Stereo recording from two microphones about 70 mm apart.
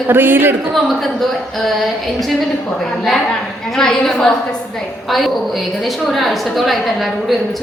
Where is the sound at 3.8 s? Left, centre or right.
Centre.